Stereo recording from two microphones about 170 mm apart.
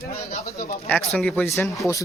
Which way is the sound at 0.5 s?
60° left (ahead or behind).